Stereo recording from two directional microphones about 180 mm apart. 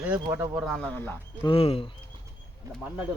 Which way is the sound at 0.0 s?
10° right (ahead or behind).